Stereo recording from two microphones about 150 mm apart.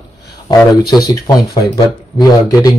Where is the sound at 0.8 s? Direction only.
25° left (ahead or behind).